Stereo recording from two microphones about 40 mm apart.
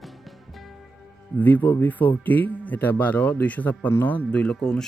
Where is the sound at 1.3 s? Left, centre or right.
Left.